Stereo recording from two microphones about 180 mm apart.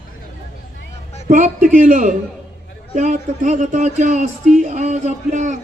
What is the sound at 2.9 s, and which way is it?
Speech, 40° right (ahead or behind).